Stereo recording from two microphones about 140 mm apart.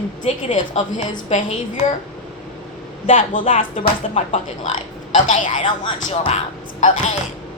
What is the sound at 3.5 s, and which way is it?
Speech, 70° left (ahead or behind).